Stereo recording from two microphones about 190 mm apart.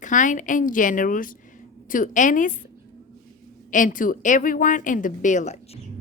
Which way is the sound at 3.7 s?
45° left (ahead or behind).